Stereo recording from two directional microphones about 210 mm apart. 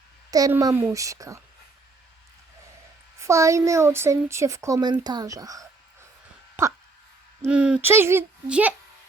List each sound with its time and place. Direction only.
0.3 s speech: 15° right (ahead or behind)
3.2 s speech: 15° right (ahead or behind)